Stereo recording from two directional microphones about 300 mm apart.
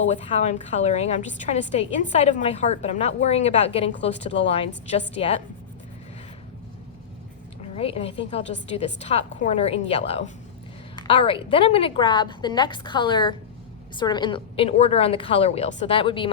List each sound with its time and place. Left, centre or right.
0.1 s a woman's voice: left
7.8 s a woman's voice: centre